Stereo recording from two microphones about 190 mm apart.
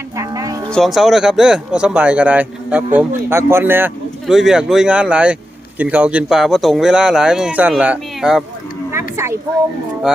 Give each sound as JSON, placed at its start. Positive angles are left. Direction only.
{"t": 0.2, "sound": "music", "side_deg": -15}
{"t": 0.7, "sound": "speech", "side_deg": 0}
{"t": 8.9, "sound": "a sound", "side_deg": -15}